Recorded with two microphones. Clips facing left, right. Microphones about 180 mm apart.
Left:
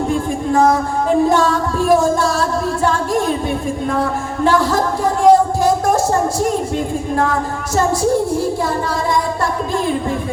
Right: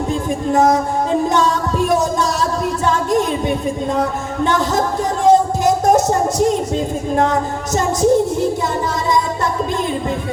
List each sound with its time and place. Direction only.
0.1 s music: 20° right (ahead or behind)
4.4 s speech: 20° right (ahead or behind)
7.8 s music: 20° right (ahead or behind)